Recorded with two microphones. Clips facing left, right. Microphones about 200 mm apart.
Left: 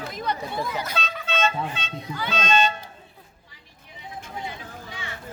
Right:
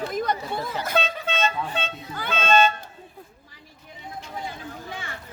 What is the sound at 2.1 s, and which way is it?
Music, 50° right (ahead or behind).